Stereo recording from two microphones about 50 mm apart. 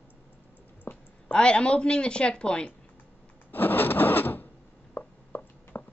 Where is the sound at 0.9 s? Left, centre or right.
Left.